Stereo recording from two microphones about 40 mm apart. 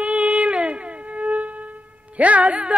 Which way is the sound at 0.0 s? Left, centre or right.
Right.